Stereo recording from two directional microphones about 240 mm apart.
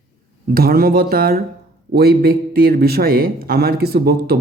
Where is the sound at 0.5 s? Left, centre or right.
Right.